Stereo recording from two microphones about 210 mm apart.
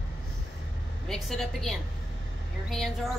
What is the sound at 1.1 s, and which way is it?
A woman's voice, centre (ahead or behind).